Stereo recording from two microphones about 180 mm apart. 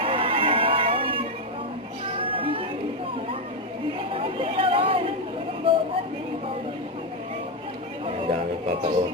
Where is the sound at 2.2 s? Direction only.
30° right (ahead or behind).